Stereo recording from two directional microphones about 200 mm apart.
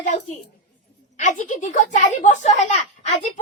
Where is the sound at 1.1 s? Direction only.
40° left (ahead or behind).